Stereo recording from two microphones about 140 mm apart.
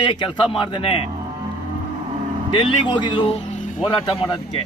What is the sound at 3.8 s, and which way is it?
Speech, 35° left (ahead or behind).